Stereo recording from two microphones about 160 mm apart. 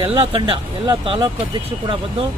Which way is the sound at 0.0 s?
35° right (ahead or behind).